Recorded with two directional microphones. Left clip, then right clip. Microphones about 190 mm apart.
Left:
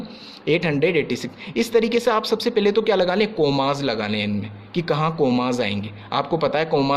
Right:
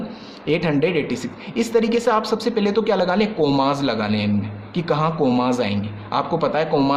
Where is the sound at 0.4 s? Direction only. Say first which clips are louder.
Even; 30° left (ahead or behind).